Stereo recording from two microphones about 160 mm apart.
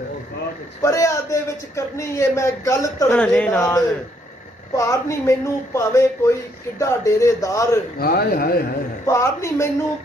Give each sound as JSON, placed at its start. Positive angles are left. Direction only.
{"t": 0.8, "sound": "speech", "side_deg": 20}
{"t": 3.2, "sound": "a man's voice", "side_deg": 5}
{"t": 4.7, "sound": "speech", "side_deg": 20}
{"t": 8.0, "sound": "speech", "side_deg": 70}
{"t": 9.0, "sound": "a man's voice", "side_deg": 20}